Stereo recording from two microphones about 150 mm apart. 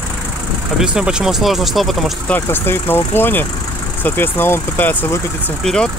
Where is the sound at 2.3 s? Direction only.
15° left (ahead or behind).